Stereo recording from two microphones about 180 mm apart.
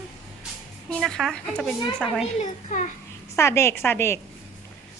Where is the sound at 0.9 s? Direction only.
Centre (ahead or behind).